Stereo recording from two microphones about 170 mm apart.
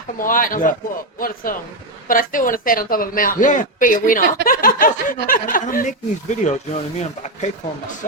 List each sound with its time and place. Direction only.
0.2 s speech: 55° left (ahead or behind)
2.0 s speech: 55° left (ahead or behind)